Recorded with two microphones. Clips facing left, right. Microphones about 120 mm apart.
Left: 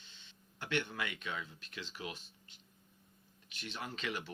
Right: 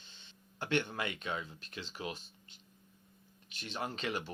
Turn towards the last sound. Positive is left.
turn(degrees=-35)  # may be behind; listen again after turning